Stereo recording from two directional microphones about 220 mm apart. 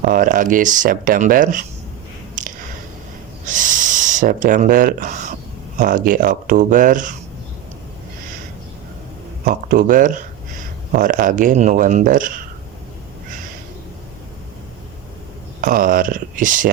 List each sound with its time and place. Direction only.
0.0 s speech: 40° right (ahead or behind)
2.4 s a sound: 35° right (ahead or behind)
3.4 s speech: 35° right (ahead or behind)
9.5 s speech: 40° right (ahead or behind)
15.6 s speech: 40° right (ahead or behind)